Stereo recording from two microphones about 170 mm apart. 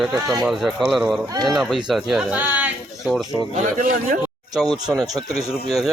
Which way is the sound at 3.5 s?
55° right (ahead or behind).